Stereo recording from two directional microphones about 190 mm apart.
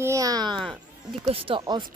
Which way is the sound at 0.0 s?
15° right (ahead or behind).